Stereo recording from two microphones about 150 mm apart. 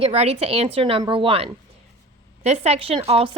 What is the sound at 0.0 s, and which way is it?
A woman's voice, 45° right (ahead or behind).